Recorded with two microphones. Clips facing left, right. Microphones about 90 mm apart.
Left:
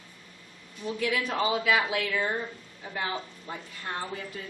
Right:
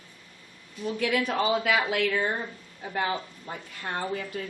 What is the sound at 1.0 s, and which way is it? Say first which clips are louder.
Speech: right 2 dB; 55° right (ahead or behind).